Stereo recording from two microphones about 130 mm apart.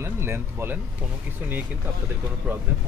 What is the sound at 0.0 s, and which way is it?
Speech, 20° right (ahead or behind).